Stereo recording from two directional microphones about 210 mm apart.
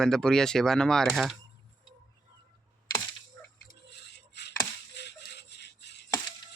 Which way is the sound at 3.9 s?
55° left (ahead or behind).